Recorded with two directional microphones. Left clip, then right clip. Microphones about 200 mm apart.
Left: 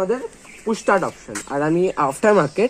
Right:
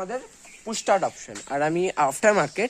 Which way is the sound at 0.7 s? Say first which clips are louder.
Left 4 dB; 45° right (ahead or behind).